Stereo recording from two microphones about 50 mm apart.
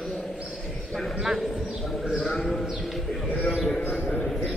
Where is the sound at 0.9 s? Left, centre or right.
Centre.